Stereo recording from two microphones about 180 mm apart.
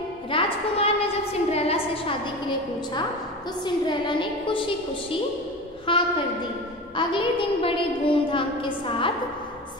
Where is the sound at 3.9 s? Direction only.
25° left (ahead or behind).